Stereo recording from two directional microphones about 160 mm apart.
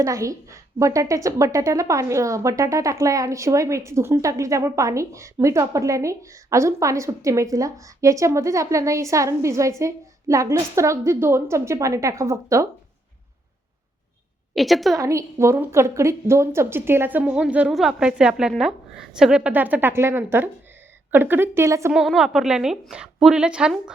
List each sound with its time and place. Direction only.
0.0 s a woman's voice: 20° right (ahead or behind)
14.5 s a woman's voice: centre (ahead or behind)
14.9 s a woman's voice: 20° right (ahead or behind)
21.9 s a woman's voice: centre (ahead or behind)